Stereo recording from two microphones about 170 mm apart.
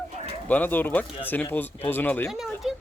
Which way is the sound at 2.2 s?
Centre (ahead or behind).